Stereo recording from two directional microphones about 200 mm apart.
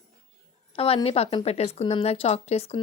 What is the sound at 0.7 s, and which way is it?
A woman's voice, 30° left (ahead or behind).